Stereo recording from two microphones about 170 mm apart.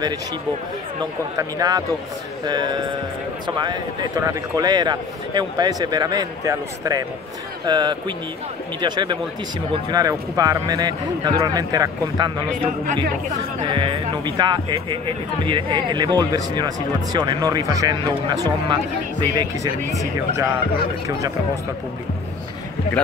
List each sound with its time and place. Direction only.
1.3 s speech: 20° right (ahead or behind)